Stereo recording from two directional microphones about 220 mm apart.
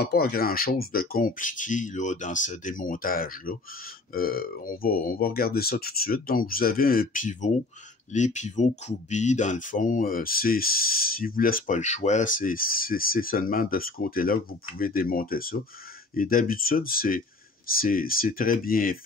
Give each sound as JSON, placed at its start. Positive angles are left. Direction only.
{"t": 0.0, "sound": "speech", "side_deg": 45}